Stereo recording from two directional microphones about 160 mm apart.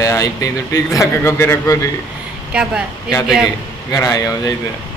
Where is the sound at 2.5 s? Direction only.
5° right (ahead or behind).